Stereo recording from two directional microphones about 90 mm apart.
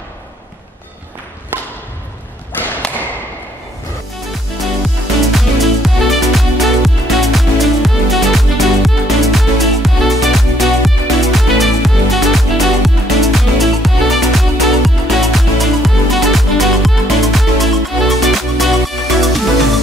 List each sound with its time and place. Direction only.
2.5 s thump: 20° left (ahead or behind)
5.3 s music: centre (ahead or behind)